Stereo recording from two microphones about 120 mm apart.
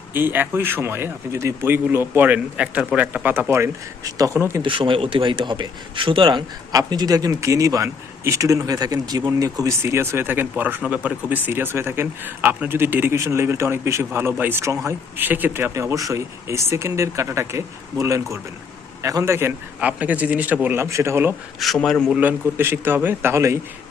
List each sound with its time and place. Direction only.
0.1 s speech: 15° right (ahead or behind)
4.6 s speech: 45° right (ahead or behind); by 21.3 s 20° right (ahead or behind)
21.6 s speech: centre (ahead or behind)
22.1 s a man's voice: 15° right (ahead or behind)